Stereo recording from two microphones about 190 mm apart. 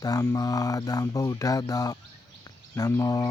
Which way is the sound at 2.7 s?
15° left (ahead or behind).